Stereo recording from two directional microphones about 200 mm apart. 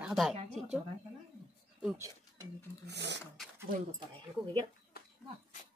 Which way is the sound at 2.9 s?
60° right (ahead or behind).